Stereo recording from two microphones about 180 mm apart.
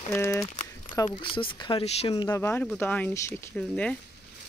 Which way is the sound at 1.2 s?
30° left (ahead or behind).